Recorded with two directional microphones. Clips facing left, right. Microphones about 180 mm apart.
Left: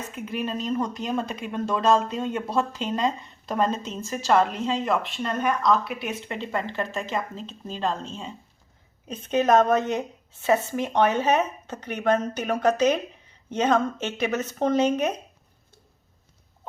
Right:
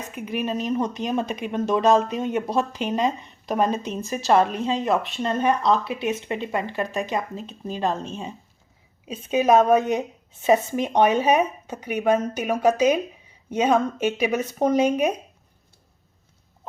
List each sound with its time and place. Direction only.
0.1 s speech: 15° right (ahead or behind)